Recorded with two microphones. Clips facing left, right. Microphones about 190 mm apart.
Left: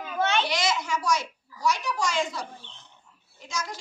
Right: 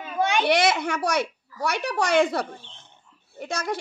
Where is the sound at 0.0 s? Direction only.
15° right (ahead or behind).